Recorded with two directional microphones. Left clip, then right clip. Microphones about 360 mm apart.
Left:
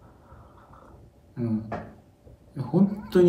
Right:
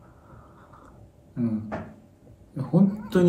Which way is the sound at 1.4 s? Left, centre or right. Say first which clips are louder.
Right 3 dB; centre.